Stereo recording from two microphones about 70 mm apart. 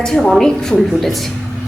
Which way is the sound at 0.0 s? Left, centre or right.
Centre.